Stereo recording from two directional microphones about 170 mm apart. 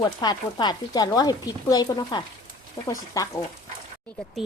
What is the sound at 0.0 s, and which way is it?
Speech, 25° left (ahead or behind).